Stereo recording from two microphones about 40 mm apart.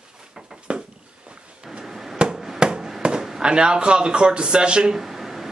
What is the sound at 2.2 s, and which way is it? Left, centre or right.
Chop, centre.